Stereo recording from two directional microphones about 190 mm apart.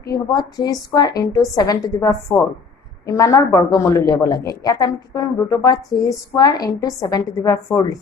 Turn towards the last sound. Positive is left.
turn(degrees=20)  # may be behind; listen again after turning